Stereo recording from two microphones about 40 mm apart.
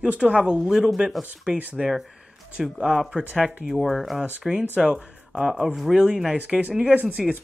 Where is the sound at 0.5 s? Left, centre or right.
Centre.